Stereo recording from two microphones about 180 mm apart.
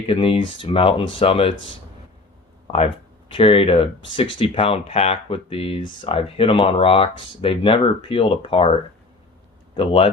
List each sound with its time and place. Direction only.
0.1 s speech: 30° left (ahead or behind)
2.7 s speech: 30° left (ahead or behind)
9.7 s speech: 30° left (ahead or behind)